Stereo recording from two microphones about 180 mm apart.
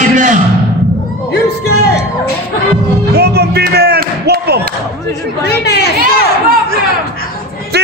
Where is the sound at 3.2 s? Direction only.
65° right (ahead or behind).